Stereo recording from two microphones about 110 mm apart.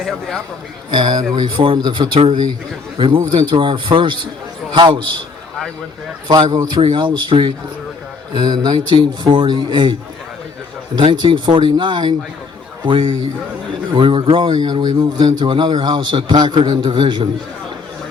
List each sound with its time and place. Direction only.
0.0 s a man's voice: 5° left (ahead or behind)
0.9 s a man's voice: 45° right (ahead or behind)
3.3 s a man's voice: 45° right (ahead or behind)
6.2 s a man's voice: 40° right (ahead or behind)